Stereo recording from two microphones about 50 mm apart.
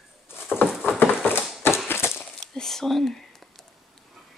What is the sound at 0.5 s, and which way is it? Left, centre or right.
Patter, centre.